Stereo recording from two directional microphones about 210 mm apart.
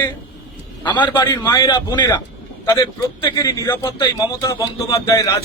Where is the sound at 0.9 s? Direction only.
20° left (ahead or behind).